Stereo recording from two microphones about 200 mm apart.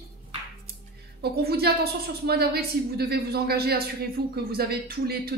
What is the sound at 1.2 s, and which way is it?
Speech, 55° right (ahead or behind).